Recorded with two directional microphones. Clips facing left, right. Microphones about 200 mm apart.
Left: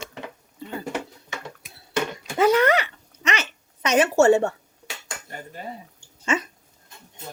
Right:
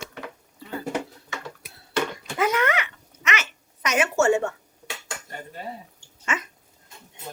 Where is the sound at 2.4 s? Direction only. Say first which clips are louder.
Left 5 dB; 35° left (ahead or behind).